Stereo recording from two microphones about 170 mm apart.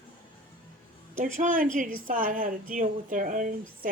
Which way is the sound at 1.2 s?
50° right (ahead or behind).